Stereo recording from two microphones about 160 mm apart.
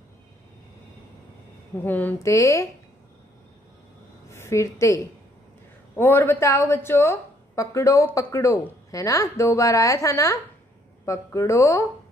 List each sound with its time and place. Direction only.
1.9 s a woman's voice: 10° left (ahead or behind)
4.3 s a woman's voice: 15° left (ahead or behind)